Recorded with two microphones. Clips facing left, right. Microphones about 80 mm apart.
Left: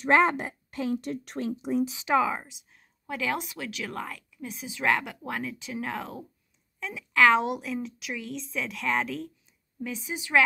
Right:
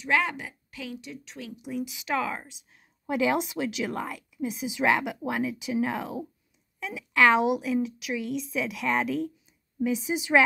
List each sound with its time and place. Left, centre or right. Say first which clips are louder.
0.0 s speech: left 5 dB; left
1.5 s speech: left 5 dB; left
2.3 s speech: left 2 dB; centre
3.1 s a woman's voice: right 6 dB; centre